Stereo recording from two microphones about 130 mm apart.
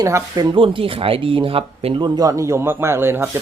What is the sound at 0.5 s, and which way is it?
Speech, 40° right (ahead or behind).